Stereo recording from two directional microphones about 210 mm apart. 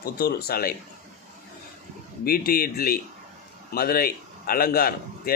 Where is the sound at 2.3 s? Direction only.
45° left (ahead or behind).